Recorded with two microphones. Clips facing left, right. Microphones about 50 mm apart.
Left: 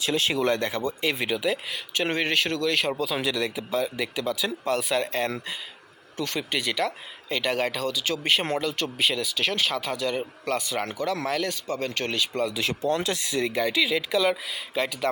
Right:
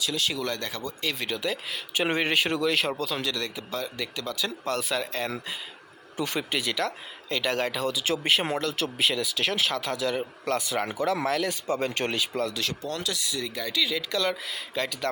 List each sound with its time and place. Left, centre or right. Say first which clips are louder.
0.0 s speech: left 5 dB; left; by 1.4 s centre
1.4 s speech: left 3 dB; centre
2.0 s speech: even; centre
2.7 s speech: left 2 dB; centre
6.1 s speech: even; centre
8.3 s speech: left 2 dB; centre
10.8 s speech: right 1 dB; centre
11.3 s speech: even; centre
11.7 s speech: right 3 dB; centre
12.1 s speech: left 2 dB; centre
12.5 s speech: left 6 dB; left